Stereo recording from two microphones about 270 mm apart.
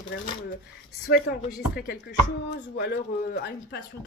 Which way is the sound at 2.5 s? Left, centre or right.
Left.